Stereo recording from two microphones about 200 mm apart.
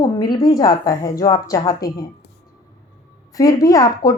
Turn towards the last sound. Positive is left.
turn(degrees=15)  # may be behind; listen again after turning